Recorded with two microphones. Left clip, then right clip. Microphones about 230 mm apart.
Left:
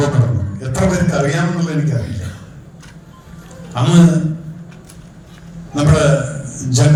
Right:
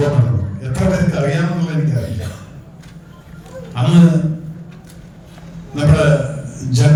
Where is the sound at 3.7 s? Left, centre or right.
Left.